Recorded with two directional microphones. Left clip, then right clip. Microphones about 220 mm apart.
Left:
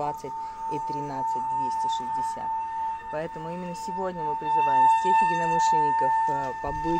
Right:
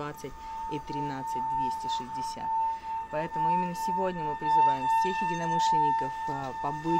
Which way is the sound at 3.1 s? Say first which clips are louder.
Right 5 dB; 15° right (ahead or behind).